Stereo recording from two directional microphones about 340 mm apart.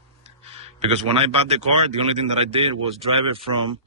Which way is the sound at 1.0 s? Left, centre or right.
Centre.